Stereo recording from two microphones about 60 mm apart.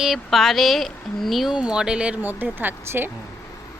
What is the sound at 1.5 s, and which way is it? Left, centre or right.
Speech, centre.